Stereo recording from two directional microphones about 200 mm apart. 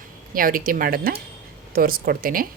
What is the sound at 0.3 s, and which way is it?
Speech, 45° right (ahead or behind).